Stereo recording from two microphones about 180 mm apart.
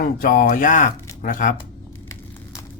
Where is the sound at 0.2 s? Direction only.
50° left (ahead or behind).